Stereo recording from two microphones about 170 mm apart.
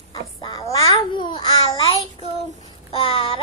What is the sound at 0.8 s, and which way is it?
Babbling, 25° left (ahead or behind).